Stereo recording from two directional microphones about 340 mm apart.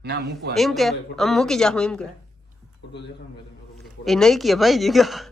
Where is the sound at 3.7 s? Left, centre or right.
Centre.